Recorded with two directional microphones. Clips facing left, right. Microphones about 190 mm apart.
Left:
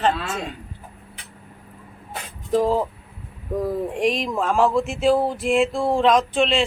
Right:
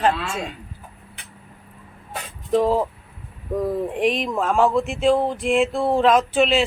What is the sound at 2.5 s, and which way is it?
Speech, centre (ahead or behind).